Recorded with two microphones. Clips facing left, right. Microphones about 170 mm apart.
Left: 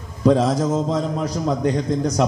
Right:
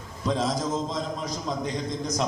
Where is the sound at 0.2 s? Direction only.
55° left (ahead or behind).